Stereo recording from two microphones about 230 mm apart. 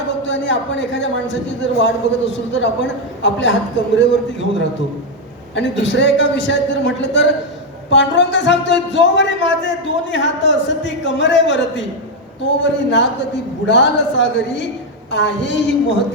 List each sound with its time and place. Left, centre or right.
0.3 s a man's voice: left
5.5 s a man's voice: left